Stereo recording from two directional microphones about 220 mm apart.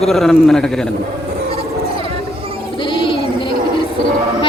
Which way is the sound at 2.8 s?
20° left (ahead or behind).